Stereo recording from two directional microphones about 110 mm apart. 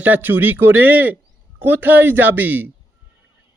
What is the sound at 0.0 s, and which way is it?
A man's voice, 15° right (ahead or behind).